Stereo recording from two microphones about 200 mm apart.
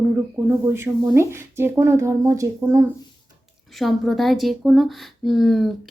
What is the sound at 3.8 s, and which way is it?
Speech, centre (ahead or behind).